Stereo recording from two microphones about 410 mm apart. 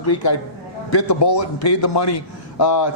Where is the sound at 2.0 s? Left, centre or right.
Left.